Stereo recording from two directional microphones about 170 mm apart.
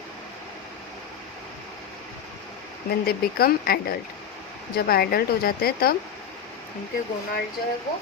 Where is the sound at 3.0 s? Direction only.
60° left (ahead or behind).